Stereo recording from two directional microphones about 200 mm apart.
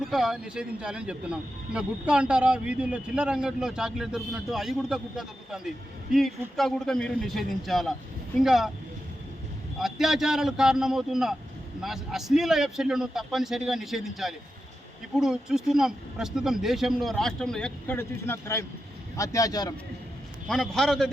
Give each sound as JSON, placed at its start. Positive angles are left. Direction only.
{"t": 0.0, "sound": "a man's voice", "side_deg": 0}
{"t": 9.7, "sound": "a man's voice", "side_deg": 0}
{"t": 20.5, "sound": "a man's voice", "side_deg": 0}